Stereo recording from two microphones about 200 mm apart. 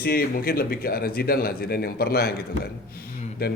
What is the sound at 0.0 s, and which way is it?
Speech, 50° left (ahead or behind).